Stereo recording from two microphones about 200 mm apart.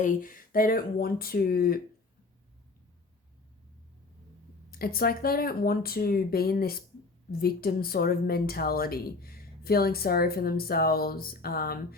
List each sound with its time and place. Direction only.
0.0 s speech: 40° left (ahead or behind)
4.7 s speech: 50° left (ahead or behind)